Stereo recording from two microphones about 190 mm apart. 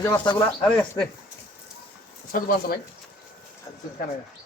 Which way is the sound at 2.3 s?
50° left (ahead or behind).